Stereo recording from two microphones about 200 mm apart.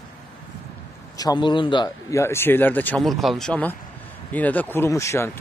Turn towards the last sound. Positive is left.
turn(degrees=15)  # may be behind; listen again after turning